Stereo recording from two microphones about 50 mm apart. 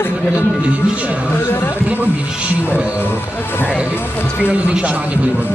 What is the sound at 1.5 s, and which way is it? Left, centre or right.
Speech, left.